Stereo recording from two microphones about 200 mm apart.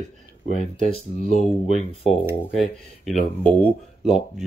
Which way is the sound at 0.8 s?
30° left (ahead or behind).